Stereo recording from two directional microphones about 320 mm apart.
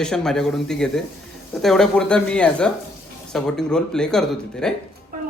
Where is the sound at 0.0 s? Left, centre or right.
Centre.